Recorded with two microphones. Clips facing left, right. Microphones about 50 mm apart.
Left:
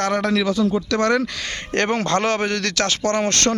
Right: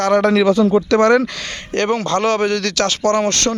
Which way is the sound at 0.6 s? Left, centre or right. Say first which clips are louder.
Right 5 dB; right.